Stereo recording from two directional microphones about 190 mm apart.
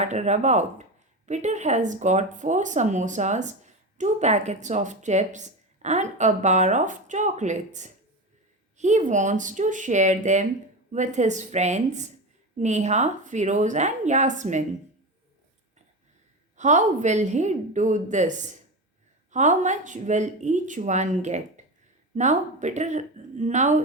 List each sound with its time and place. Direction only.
0.0 s speech: 35° right (ahead or behind)
16.6 s speech: 40° right (ahead or behind)